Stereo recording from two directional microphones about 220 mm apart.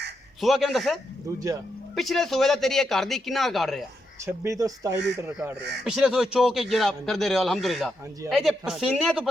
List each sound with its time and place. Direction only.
0.4 s speech: centre (ahead or behind)
2.0 s speech: centre (ahead or behind)
4.3 s speech: 15° right (ahead or behind)
5.5 s speech: 50° right (ahead or behind)
5.8 s speech: centre (ahead or behind)